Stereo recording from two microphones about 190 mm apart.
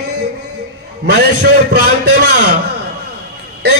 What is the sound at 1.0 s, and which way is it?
A man's voice, 60° right (ahead or behind).